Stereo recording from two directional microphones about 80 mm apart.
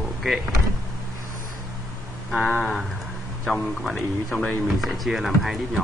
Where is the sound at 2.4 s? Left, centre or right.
Centre.